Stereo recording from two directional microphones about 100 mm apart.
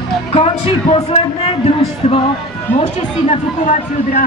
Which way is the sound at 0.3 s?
70° left (ahead or behind).